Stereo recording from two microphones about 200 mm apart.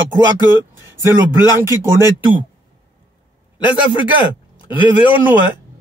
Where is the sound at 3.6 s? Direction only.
25° left (ahead or behind).